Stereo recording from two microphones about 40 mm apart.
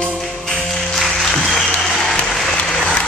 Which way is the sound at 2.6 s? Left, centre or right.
Left.